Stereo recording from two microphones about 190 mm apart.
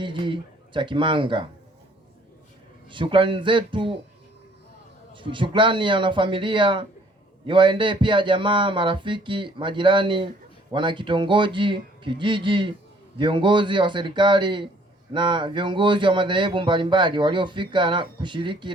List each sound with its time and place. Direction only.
0.0 s speech: 25° right (ahead or behind)
2.9 s speech: 25° right (ahead or behind)
5.1 s speech: 25° right (ahead or behind)